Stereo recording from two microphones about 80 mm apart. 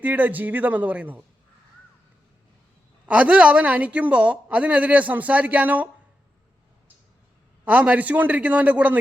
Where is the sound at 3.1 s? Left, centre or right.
Centre.